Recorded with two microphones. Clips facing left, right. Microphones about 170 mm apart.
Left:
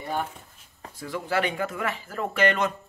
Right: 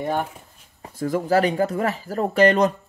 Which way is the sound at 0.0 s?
50° right (ahead or behind).